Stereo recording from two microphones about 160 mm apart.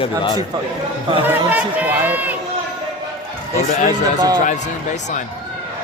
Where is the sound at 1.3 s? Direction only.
10° right (ahead or behind).